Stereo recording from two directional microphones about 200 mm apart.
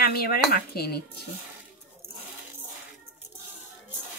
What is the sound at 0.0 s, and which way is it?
Speech, 50° left (ahead or behind).